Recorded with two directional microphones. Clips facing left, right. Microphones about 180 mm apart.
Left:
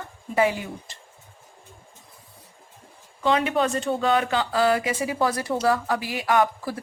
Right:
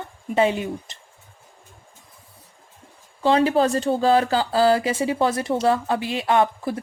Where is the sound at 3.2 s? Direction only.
30° right (ahead or behind).